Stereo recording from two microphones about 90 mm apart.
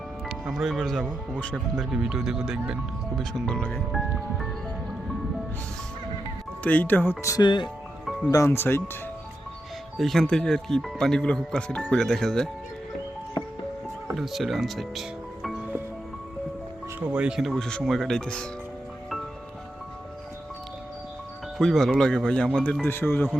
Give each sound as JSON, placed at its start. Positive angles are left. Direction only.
{"t": 0.3, "sound": "speech", "side_deg": 0}
{"t": 3.2, "sound": "speech", "side_deg": 5}
{"t": 3.9, "sound": "speech", "side_deg": 0}
{"t": 6.6, "sound": "speech", "side_deg": 20}
{"t": 7.4, "sound": "speech", "side_deg": 60}
{"t": 8.4, "sound": "speech", "side_deg": 25}
{"t": 10.0, "sound": "speech", "side_deg": 5}
{"t": 14.2, "sound": "speech", "side_deg": 0}
{"t": 15.4, "sound": "music", "side_deg": -5}
{"t": 17.0, "sound": "speech", "side_deg": -10}
{"t": 17.4, "sound": "speech", "side_deg": 5}
{"t": 21.6, "sound": "speech", "side_deg": 5}
{"t": 22.8, "sound": "speech", "side_deg": 25}